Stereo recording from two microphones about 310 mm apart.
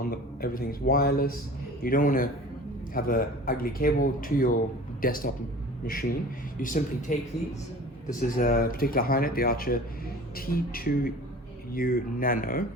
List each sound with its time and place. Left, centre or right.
0.0 s speech: left
8.4 s speech: left